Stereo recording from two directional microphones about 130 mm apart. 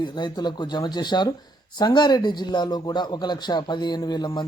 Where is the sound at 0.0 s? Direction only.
35° left (ahead or behind).